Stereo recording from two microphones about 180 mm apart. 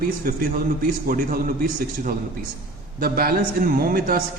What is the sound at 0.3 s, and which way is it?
A man's voice, 55° right (ahead or behind).